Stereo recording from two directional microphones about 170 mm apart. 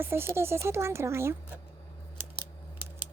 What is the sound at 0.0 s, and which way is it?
Speech, 15° right (ahead or behind).